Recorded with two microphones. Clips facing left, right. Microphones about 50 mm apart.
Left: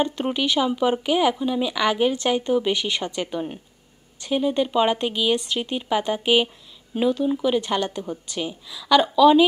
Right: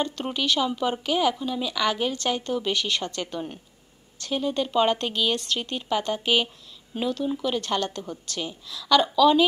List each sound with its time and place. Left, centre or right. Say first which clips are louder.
0.0 s speech: left 4 dB; centre